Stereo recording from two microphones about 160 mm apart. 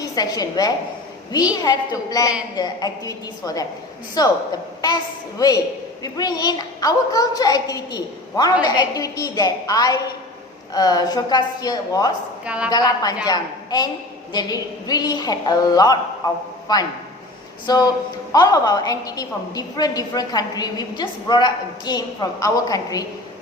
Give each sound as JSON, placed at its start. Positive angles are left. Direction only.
{"t": 0.0, "sound": "a woman's voice", "side_deg": 25}
{"t": 5.4, "sound": "a woman's voice", "side_deg": 20}
{"t": 12.5, "sound": "a woman's voice", "side_deg": -5}
{"t": 12.7, "sound": "a woman's voice", "side_deg": 25}